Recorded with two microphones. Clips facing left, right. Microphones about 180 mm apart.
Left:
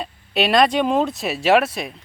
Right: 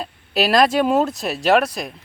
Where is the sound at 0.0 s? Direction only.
Centre (ahead or behind).